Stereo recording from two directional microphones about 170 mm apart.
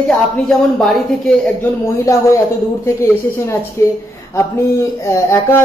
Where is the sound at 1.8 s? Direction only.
15° left (ahead or behind).